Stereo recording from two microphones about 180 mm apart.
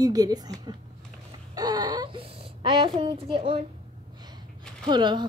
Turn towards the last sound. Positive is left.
turn(degrees=-25)  # may be behind; listen again after turning